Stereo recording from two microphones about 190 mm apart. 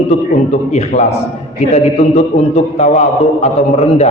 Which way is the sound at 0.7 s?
35° left (ahead or behind).